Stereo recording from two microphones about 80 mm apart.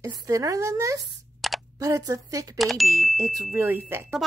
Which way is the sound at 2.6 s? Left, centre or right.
Centre.